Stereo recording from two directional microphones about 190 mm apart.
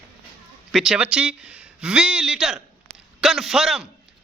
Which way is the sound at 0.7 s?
Centre (ahead or behind).